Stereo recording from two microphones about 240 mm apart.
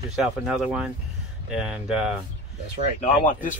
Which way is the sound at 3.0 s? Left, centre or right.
Left.